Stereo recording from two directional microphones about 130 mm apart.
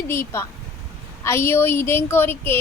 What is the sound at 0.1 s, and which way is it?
Speech, 20° left (ahead or behind).